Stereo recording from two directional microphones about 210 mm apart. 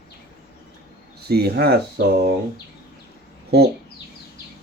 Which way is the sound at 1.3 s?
50° right (ahead or behind).